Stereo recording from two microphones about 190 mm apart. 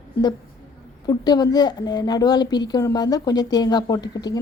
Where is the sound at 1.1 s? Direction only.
20° left (ahead or behind).